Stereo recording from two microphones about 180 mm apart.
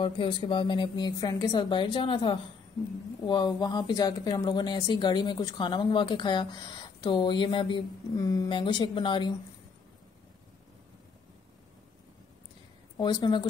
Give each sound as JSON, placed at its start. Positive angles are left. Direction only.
{"t": 0.0, "sound": "speech", "side_deg": 30}
{"t": 12.9, "sound": "speech", "side_deg": 25}